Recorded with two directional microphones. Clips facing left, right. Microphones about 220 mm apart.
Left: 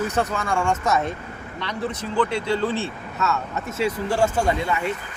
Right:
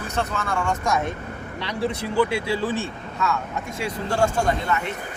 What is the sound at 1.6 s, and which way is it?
Speech, 10° right (ahead or behind).